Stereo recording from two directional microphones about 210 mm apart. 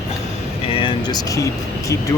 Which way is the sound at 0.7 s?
25° left (ahead or behind).